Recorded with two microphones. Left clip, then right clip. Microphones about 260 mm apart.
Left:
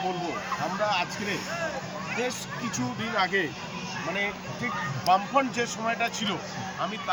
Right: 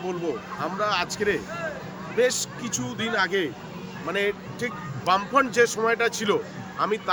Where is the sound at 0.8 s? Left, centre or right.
Centre.